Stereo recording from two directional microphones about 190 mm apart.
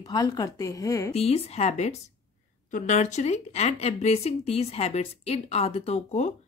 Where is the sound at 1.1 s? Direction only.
30° left (ahead or behind).